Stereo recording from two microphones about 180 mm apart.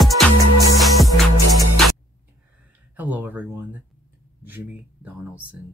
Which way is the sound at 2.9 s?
10° right (ahead or behind).